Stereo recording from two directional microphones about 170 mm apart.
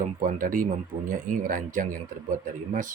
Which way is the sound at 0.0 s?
50° right (ahead or behind).